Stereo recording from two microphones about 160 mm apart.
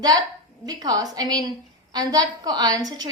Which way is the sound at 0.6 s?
25° right (ahead or behind).